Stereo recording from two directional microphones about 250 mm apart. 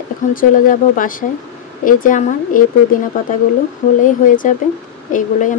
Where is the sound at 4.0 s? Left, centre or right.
Left.